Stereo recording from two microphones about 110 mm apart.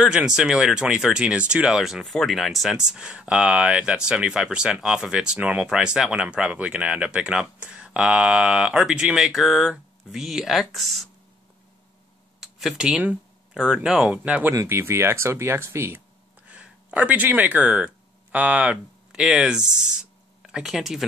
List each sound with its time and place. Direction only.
0.0 s speech: 5° right (ahead or behind)
12.4 s speech: centre (ahead or behind)
14.5 s speech: 25° right (ahead or behind)
16.4 s speech: 10° right (ahead or behind)